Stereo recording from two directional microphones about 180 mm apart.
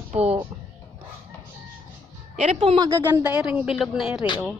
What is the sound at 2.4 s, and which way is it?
Speech, 35° right (ahead or behind).